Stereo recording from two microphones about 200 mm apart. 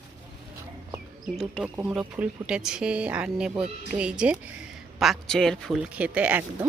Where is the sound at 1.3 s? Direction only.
Centre (ahead or behind).